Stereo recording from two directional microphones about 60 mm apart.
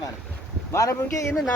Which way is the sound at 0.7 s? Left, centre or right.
Left.